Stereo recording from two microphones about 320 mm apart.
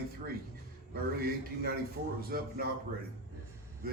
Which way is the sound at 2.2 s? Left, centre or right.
Right.